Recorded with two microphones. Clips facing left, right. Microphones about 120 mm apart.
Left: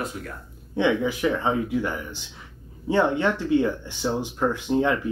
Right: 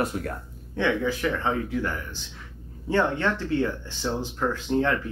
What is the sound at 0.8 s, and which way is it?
Speech, 15° left (ahead or behind).